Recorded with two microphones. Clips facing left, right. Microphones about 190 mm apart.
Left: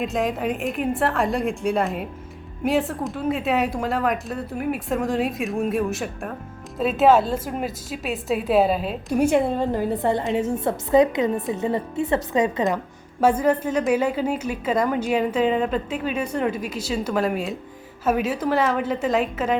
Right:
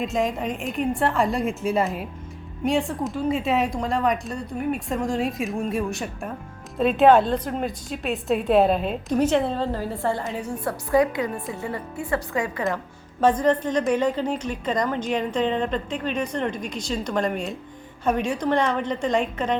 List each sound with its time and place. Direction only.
0.0 s a woman's voice: centre (ahead or behind); by 12.8 s 20° left (ahead or behind)
13.1 s a woman's voice: 10° left (ahead or behind)